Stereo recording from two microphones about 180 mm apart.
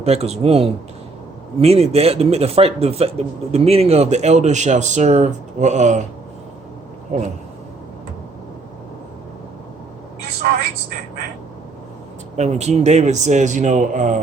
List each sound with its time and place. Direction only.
0.0 s speech: 35° right (ahead or behind)
7.1 s speech: 40° right (ahead or behind)
12.4 s speech: 40° right (ahead or behind)